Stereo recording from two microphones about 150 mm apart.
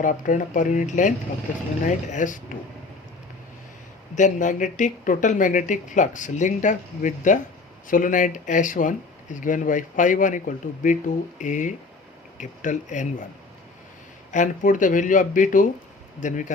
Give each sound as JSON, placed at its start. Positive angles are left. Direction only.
{"t": 0.0, "sound": "speech", "side_deg": 60}
{"t": 4.1, "sound": "speech", "side_deg": 55}
{"t": 14.3, "sound": "speech", "side_deg": 55}